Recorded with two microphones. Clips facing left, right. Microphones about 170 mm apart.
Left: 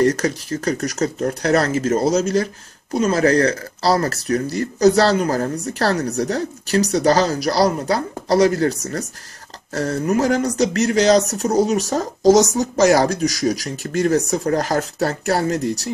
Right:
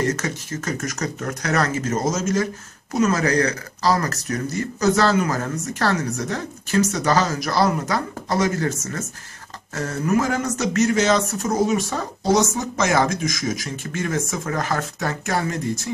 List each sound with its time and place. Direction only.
0.0 s speech: 35° left (ahead or behind)
12.5 s speech: 40° left (ahead or behind)
15.6 s speech: 75° left (ahead or behind)